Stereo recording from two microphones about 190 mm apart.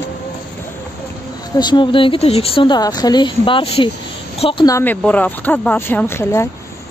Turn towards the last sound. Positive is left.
turn(degrees=15)  # may be behind; listen again after turning